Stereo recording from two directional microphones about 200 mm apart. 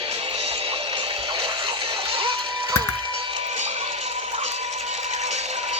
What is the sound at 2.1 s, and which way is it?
Music, 25° right (ahead or behind).